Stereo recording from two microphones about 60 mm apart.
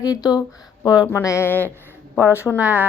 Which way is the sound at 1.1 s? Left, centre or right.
Left.